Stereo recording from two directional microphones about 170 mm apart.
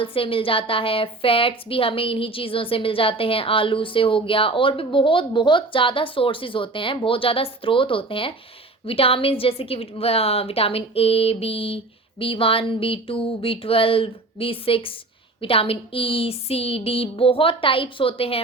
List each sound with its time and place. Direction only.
0.0 s a woman's voice: 30° left (ahead or behind)